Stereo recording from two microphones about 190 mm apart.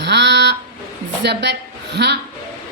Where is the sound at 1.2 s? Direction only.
65° right (ahead or behind).